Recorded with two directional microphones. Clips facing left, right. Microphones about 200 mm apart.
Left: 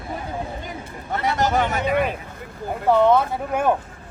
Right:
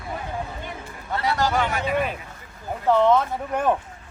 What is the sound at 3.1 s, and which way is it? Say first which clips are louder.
Speech: left 2 dB; 10° left (ahead or behind).